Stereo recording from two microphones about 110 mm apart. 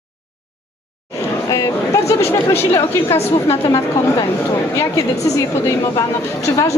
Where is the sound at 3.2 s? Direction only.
65° left (ahead or behind).